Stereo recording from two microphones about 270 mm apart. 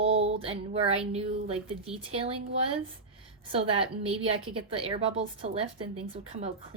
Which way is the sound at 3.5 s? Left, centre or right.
Right.